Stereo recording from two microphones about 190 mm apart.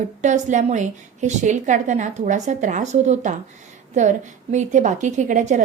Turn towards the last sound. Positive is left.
turn(degrees=-40)  # may be behind; listen again after turning